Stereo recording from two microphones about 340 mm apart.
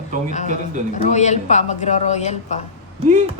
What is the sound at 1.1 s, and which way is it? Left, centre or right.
A woman's voice, centre.